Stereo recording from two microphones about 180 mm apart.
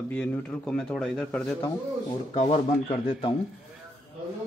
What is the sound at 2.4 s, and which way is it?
Speech, 35° left (ahead or behind).